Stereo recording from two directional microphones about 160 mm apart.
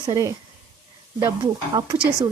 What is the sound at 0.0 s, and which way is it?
Speech, 20° right (ahead or behind).